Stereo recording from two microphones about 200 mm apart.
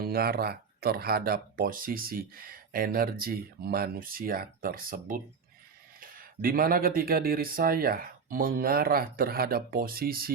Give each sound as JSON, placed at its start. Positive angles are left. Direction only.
{"t": 0.0, "sound": "speech", "side_deg": -50}